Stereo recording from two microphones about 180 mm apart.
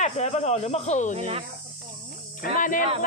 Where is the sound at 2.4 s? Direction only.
50° left (ahead or behind).